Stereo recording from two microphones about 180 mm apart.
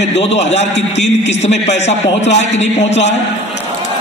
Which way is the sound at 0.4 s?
35° left (ahead or behind).